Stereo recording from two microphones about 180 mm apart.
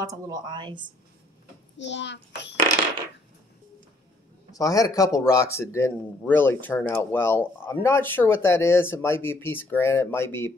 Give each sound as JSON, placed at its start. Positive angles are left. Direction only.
{"t": 0.0, "sound": "a woman's voice", "side_deg": -20}
{"t": 1.8, "sound": "a child's voice", "side_deg": 80}
{"t": 4.5, "sound": "speech", "side_deg": 20}